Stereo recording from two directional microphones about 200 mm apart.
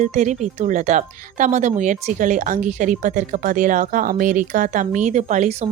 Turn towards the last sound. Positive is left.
turn(degrees=-35)  # may be behind; listen again after turning